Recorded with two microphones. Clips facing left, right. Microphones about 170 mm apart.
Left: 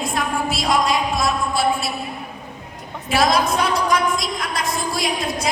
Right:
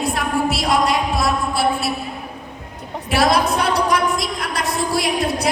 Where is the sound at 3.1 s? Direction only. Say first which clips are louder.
Right 1 dB; 65° right (ahead or behind).